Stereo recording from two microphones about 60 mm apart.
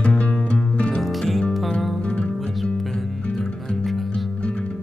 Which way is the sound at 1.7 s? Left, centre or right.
Centre.